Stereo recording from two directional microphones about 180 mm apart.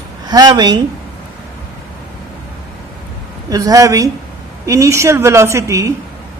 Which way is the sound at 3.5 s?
20° right (ahead or behind).